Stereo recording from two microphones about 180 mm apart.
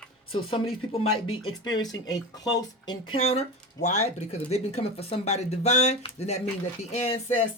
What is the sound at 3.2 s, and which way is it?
Speech, 35° left (ahead or behind).